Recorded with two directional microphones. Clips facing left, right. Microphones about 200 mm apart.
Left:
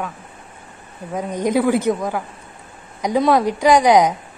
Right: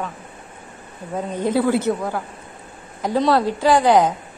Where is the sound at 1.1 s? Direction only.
15° left (ahead or behind).